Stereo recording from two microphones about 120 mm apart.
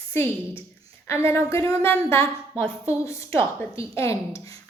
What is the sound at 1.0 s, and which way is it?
A woman's voice, 20° left (ahead or behind).